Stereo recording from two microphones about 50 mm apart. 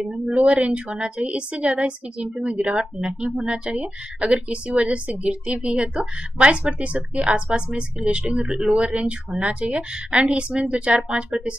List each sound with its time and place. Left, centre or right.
0.0 s a woman's voice: centre
8.5 s speech: centre
8.7 s a woman's voice: right